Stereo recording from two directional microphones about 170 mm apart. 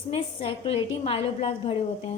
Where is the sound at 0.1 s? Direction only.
35° left (ahead or behind).